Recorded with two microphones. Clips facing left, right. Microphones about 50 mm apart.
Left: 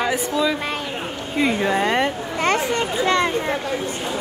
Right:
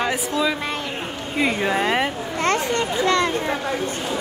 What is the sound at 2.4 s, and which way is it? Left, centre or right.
Children playing, centre.